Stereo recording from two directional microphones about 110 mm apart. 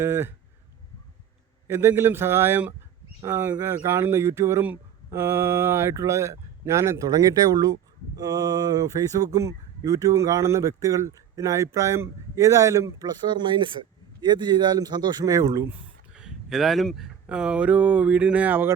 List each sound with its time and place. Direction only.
0.0 s speech: 25° right (ahead or behind)
1.6 s speech: 20° right (ahead or behind)
16.1 s speech: 5° right (ahead or behind)